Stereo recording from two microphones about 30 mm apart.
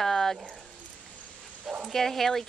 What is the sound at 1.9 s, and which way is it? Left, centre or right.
Speech, centre.